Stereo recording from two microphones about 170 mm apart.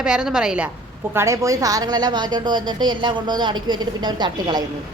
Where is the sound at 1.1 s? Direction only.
15° right (ahead or behind).